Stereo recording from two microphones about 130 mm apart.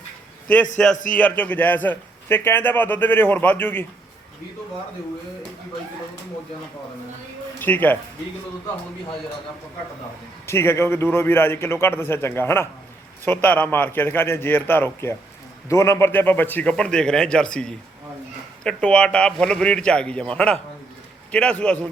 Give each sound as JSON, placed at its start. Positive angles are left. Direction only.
{"t": 0.4, "sound": "a man's voice", "side_deg": 10}
{"t": 0.9, "sound": "speech", "side_deg": 90}
{"t": 1.2, "sound": "a man's voice", "side_deg": 10}
{"t": 7.6, "sound": "a man's voice", "side_deg": 15}
{"t": 10.4, "sound": "a man's voice", "side_deg": 20}